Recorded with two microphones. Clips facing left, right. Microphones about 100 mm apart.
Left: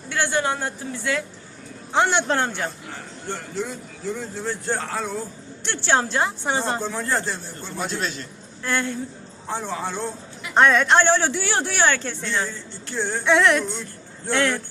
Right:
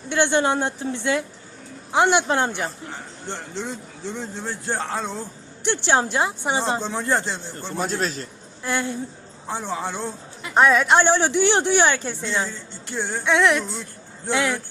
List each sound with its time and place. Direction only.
0.1 s a man's voice: 20° right (ahead or behind)
7.8 s a man's voice: 40° right (ahead or behind)
8.6 s speech: 15° right (ahead or behind)
10.5 s speech: 5° right (ahead or behind)
13.2 s a sound: centre (ahead or behind)
14.3 s speech: 10° right (ahead or behind)